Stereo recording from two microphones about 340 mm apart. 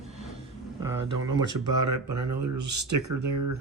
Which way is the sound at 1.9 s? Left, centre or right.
Right.